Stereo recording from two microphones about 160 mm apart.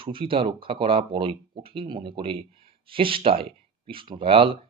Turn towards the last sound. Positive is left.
turn(degrees=-35)  # may be behind; listen again after turning